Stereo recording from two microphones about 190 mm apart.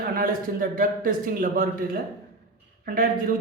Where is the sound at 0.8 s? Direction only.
50° right (ahead or behind).